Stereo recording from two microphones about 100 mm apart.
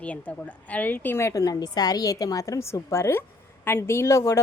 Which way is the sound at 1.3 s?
35° left (ahead or behind).